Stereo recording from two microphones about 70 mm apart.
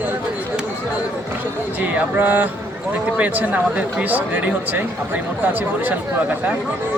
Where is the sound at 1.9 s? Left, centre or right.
Right.